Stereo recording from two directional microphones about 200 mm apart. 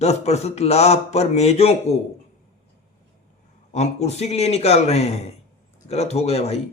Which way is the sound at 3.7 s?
35° left (ahead or behind).